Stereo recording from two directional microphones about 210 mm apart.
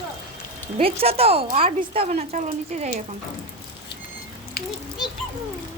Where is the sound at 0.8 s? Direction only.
25° right (ahead or behind).